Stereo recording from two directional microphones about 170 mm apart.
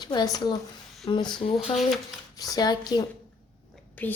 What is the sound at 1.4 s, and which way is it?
Speech, 40° left (ahead or behind).